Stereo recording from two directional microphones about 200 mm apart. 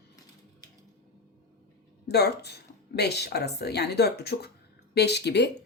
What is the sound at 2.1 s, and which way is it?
Speech, 55° left (ahead or behind).